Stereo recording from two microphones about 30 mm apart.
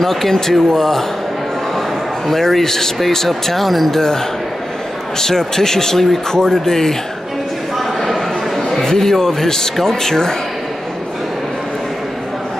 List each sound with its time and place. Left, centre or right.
0.0 s speech: centre
2.2 s speech: centre
5.2 s speech: centre
8.0 s a sound: centre
8.8 s speech: centre